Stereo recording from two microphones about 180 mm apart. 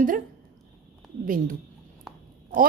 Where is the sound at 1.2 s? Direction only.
50° right (ahead or behind).